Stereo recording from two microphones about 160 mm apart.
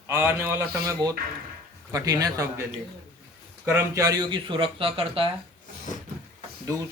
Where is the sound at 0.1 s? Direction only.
15° right (ahead or behind).